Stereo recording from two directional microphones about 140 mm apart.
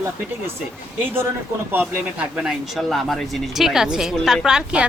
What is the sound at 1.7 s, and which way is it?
Speech, 10° right (ahead or behind).